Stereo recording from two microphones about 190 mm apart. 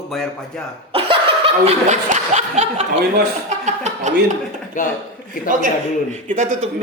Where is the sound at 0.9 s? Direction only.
30° right (ahead or behind).